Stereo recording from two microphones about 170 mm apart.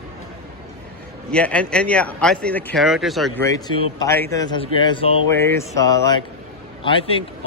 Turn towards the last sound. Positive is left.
turn(degrees=30)  # may be behind; listen again after turning